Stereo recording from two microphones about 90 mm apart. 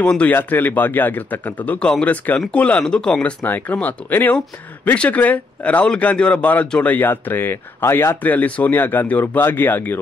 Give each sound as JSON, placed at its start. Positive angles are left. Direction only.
{"t": 0.0, "sound": "a man's voice", "side_deg": 10}